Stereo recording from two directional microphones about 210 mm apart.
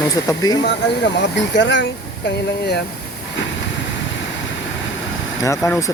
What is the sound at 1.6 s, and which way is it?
Speech, 60° left (ahead or behind).